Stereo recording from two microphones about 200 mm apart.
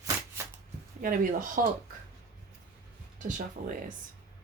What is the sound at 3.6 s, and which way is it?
Speech, 40° right (ahead or behind).